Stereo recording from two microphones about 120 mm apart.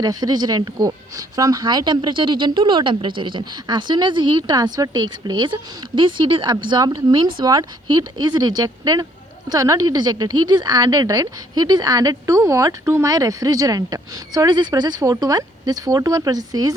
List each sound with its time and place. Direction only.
0.0 s a woman's voice: 35° right (ahead or behind)